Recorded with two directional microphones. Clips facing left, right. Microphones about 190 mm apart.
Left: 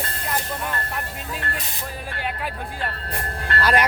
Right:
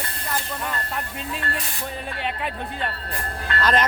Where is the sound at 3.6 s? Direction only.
10° left (ahead or behind).